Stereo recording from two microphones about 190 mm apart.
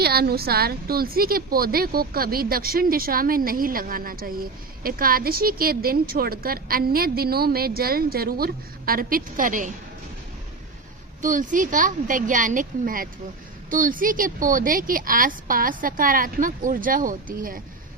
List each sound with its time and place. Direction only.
0.0 s a woman's voice: 55° right (ahead or behind)
11.2 s a woman's voice: 45° right (ahead or behind)